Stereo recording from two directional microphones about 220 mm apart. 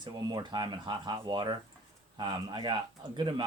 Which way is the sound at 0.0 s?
20° right (ahead or behind).